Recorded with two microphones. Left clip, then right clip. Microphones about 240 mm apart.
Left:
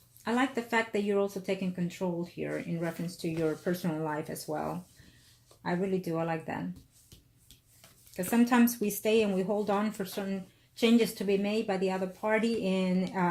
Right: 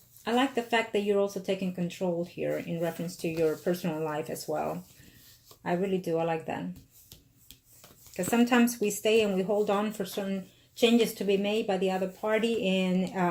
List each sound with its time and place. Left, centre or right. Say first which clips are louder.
0.3 s speech: right 3 dB; left
6.1 s speech: right 4 dB; centre
8.1 s speech: right 2 dB; left